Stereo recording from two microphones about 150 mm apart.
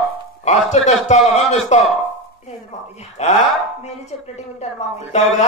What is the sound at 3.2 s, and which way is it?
Music, 45° left (ahead or behind).